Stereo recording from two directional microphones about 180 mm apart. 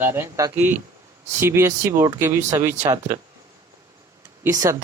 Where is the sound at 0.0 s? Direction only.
15° right (ahead or behind).